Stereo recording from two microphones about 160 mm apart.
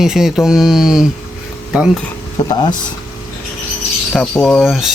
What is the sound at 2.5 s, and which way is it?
Speech, 30° left (ahead or behind).